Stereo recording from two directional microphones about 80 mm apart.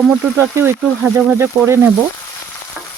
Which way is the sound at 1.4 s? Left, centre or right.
Right.